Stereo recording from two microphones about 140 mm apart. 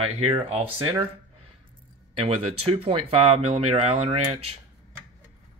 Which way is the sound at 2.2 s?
45° right (ahead or behind).